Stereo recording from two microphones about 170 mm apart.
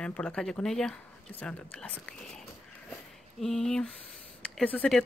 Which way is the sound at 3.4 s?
5° left (ahead or behind).